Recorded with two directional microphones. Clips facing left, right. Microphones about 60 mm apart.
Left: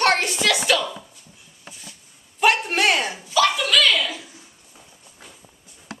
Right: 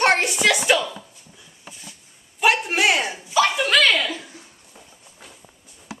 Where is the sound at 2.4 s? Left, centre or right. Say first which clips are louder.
Even; centre.